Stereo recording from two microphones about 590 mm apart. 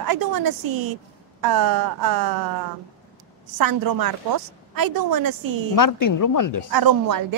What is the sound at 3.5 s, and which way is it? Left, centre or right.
A woman's voice, right.